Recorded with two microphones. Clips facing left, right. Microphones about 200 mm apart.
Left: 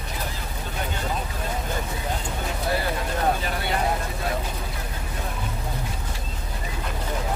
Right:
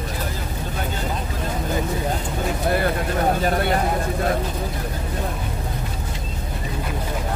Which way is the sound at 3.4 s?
50° right (ahead or behind).